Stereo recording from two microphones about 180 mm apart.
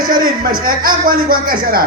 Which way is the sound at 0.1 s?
50° right (ahead or behind).